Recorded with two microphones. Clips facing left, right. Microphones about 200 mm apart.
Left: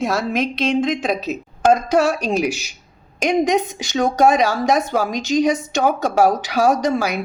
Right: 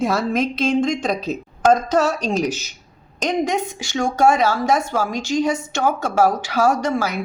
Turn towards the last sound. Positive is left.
turn(degrees=15)  # may be behind; listen again after turning